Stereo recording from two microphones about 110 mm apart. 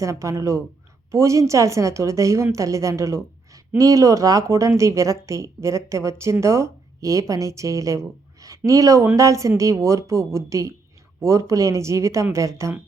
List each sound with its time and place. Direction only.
0.0 s speech: 30° right (ahead or behind)